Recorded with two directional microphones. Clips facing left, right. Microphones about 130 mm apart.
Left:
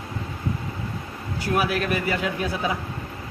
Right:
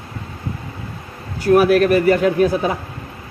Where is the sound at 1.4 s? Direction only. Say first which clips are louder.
Right 11 dB; 50° right (ahead or behind).